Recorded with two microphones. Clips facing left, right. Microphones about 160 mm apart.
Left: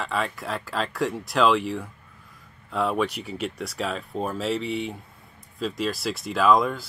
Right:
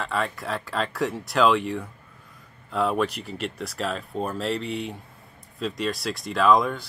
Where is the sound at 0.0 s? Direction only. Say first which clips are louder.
Even; centre (ahead or behind).